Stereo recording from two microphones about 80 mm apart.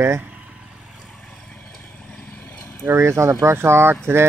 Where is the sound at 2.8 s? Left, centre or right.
Right.